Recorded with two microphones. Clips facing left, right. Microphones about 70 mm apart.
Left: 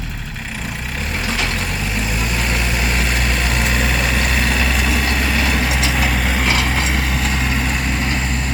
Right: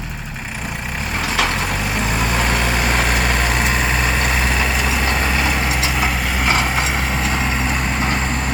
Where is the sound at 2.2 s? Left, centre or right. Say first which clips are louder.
Right 4 dB; right; by 6.5 s centre.